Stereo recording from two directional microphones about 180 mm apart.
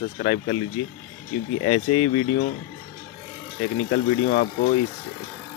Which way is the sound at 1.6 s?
35° left (ahead or behind).